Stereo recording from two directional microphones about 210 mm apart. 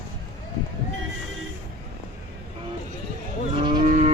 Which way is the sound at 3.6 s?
25° right (ahead or behind).